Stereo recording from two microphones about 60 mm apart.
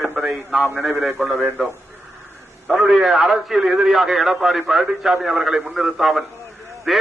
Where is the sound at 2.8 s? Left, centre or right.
Centre.